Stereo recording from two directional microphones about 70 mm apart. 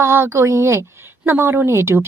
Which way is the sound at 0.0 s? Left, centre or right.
Right.